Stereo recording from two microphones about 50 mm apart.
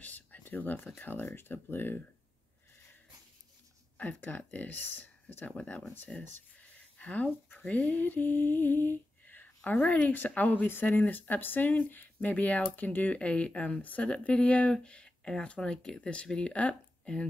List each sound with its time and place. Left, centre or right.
0.0 s a sound: left
0.9 s speech: left
4.2 s speech: left
5.5 s speech: centre
7.0 s speech: left
7.6 s a sound: left
9.7 s speech: left